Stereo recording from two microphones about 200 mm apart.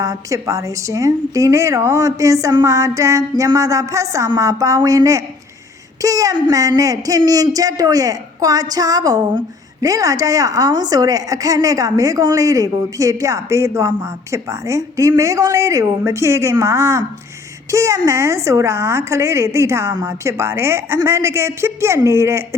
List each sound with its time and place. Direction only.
0.0 s a woman's voice: 15° right (ahead or behind)